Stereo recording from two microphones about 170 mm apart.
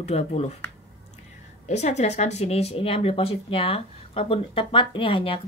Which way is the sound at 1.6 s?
40° left (ahead or behind).